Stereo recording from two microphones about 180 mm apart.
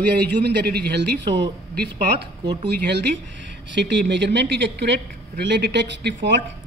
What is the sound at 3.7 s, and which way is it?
A woman's voice, 75° right (ahead or behind).